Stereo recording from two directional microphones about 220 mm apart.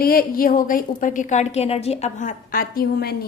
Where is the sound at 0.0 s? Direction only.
40° left (ahead or behind).